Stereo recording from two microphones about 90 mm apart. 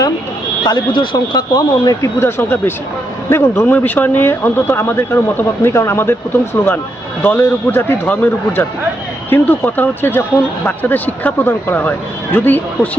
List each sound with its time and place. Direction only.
0.6 s speech: 55° left (ahead or behind)
2.1 s speech: 25° left (ahead or behind)